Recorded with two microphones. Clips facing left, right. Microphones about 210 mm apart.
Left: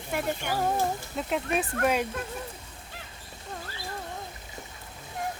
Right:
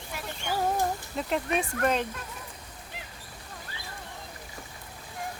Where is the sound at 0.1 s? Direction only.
55° left (ahead or behind).